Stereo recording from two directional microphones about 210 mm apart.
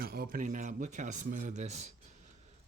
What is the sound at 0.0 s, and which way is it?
Speech, 45° right (ahead or behind).